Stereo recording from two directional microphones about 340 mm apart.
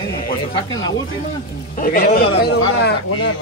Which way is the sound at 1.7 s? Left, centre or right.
Left.